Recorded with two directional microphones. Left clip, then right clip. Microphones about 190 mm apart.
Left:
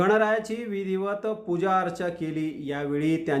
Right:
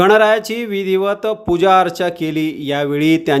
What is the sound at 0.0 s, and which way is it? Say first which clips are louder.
Speech: right 11 dB; 40° right (ahead or behind).